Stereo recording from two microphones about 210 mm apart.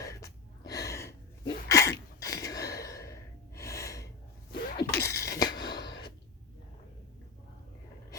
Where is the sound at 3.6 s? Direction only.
15° left (ahead or behind).